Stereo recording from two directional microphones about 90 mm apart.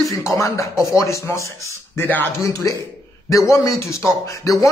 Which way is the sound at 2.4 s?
40° left (ahead or behind).